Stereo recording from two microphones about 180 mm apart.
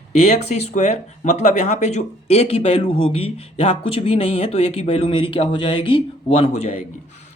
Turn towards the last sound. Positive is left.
turn(degrees=35)  # may be behind; listen again after turning